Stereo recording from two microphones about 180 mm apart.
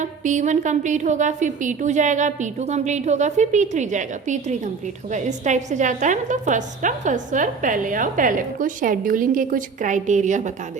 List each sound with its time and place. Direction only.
0.0 s a woman's voice: 45° right (ahead or behind)